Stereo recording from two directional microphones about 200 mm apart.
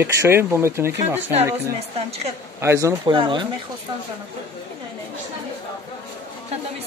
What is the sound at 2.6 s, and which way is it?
Speech, 15° right (ahead or behind).